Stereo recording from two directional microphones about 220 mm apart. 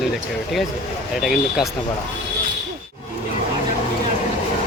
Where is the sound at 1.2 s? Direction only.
Centre (ahead or behind).